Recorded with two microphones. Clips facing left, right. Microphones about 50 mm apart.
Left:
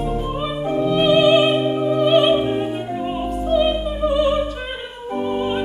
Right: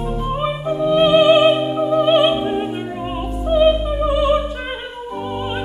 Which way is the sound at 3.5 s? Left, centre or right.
Centre.